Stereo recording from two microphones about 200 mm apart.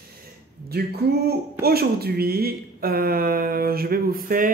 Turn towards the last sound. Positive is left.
turn(degrees=-45)  # may be behind; listen again after turning